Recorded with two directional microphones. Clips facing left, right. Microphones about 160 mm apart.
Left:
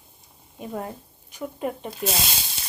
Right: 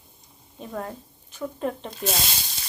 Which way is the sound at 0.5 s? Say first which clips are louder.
Left 1 dB; 10° left (ahead or behind).